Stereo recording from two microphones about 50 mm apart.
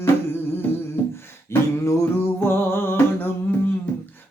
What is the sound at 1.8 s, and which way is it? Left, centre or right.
Music, left.